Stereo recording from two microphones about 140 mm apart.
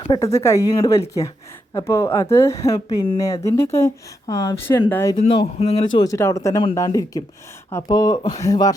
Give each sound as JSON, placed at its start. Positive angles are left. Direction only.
{"t": 0.2, "sound": "speech", "side_deg": 20}
{"t": 5.3, "sound": "speech", "side_deg": 45}
{"t": 5.8, "sound": "speech", "side_deg": 30}